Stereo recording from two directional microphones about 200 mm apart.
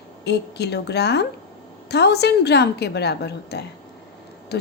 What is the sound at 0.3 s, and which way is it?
A woman's voice, 55° left (ahead or behind).